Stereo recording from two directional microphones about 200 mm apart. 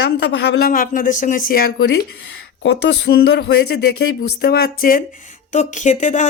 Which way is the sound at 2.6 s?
60° left (ahead or behind).